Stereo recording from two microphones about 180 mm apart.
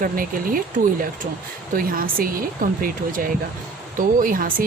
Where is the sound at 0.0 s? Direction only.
50° right (ahead or behind).